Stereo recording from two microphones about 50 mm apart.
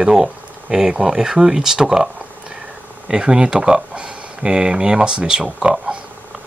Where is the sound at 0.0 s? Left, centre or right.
Centre.